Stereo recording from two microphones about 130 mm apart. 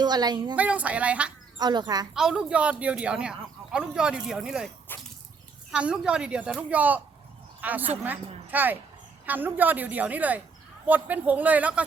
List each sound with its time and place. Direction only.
0.0 s a woman's voice: 30° right (ahead or behind)
0.5 s speech: 10° right (ahead or behind)
1.5 s a woman's voice: 35° right (ahead or behind)
2.1 s speech: 5° right (ahead or behind)
4.9 s speech: 15° left (ahead or behind)
5.7 s a woman's voice: 5° right (ahead or behind)